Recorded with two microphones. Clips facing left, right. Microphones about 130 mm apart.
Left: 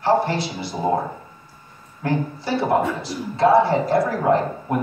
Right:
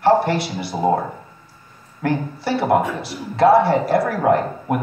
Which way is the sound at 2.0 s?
70° right (ahead or behind).